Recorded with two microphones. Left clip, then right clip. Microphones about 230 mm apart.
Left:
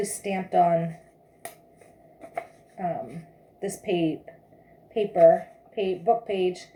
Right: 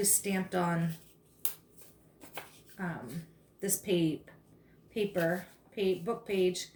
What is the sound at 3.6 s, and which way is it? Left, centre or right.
Speech, centre.